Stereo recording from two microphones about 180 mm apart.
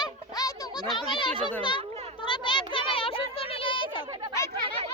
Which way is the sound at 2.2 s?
25° left (ahead or behind).